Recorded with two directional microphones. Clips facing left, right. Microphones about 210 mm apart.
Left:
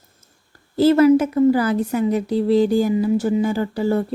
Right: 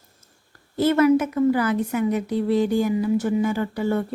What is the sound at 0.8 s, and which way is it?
A woman's voice, 30° left (ahead or behind).